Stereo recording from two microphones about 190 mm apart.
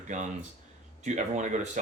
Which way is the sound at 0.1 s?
40° right (ahead or behind).